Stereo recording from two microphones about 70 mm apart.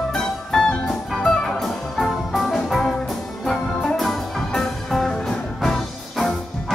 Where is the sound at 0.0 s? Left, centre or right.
Centre.